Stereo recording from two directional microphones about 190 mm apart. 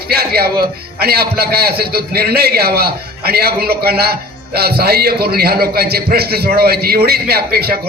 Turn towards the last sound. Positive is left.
turn(degrees=-55)  # may be behind; listen again after turning